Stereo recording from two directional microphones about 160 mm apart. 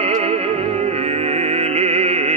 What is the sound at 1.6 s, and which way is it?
Music, 40° right (ahead or behind).